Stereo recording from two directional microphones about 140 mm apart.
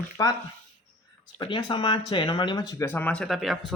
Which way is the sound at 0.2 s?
30° left (ahead or behind).